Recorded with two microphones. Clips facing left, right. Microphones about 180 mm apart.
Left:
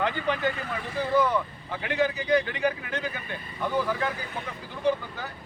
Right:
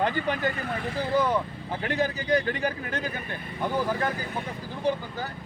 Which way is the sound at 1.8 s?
40° right (ahead or behind).